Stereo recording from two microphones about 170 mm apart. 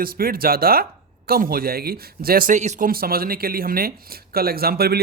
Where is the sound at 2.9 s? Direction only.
60° right (ahead or behind).